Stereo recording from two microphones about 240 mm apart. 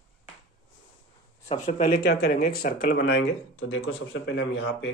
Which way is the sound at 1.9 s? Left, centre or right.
Left.